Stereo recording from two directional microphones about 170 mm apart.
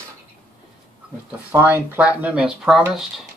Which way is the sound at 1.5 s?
15° right (ahead or behind).